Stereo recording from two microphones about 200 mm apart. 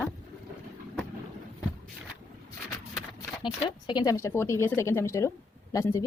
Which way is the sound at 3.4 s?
20° left (ahead or behind).